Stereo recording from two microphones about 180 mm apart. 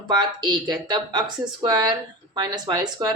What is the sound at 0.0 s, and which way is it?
Speech, 25° right (ahead or behind).